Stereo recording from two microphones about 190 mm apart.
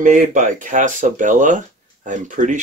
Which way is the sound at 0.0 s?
40° right (ahead or behind).